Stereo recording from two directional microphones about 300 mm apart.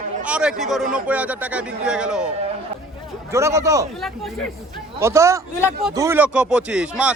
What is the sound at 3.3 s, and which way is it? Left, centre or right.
Speech, centre.